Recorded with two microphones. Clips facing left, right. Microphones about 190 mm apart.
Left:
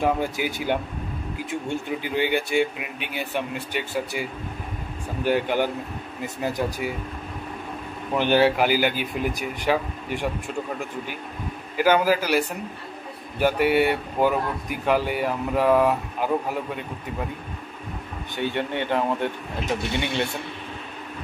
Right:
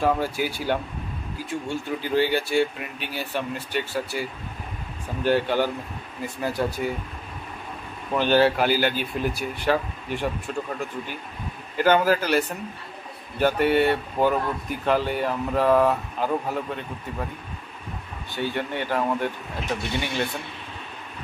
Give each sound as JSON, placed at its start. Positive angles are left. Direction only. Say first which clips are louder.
{"t": 0.0, "sound": "speech", "louder": "even", "side_deg": 20}
{"t": 8.2, "sound": "speech", "louder": "even", "side_deg": 15}
{"t": 11.7, "sound": "speech", "louder": "even", "side_deg": 10}
{"t": 18.3, "sound": "speech", "louder": "left 1 dB", "side_deg": 20}